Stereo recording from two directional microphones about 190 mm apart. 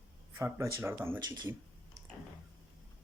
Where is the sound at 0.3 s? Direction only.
15° right (ahead or behind).